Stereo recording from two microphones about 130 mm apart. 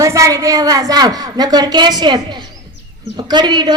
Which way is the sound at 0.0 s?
25° right (ahead or behind).